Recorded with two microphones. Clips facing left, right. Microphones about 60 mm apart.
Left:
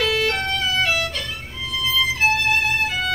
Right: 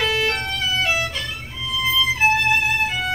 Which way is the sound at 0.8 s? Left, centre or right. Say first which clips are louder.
Even; right.